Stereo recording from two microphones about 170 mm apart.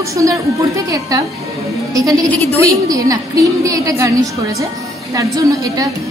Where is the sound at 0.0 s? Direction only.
20° right (ahead or behind).